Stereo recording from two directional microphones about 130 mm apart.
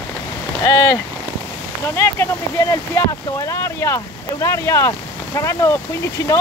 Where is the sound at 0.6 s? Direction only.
20° left (ahead or behind).